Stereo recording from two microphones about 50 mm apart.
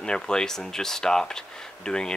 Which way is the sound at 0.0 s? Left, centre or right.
Centre.